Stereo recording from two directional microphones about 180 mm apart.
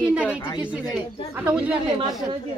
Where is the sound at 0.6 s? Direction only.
5° right (ahead or behind).